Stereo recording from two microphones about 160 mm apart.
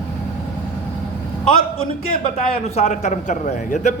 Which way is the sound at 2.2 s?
45° left (ahead or behind).